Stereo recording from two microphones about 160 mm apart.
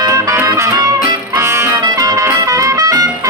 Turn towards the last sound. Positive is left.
turn(degrees=-20)  # may be behind; listen again after turning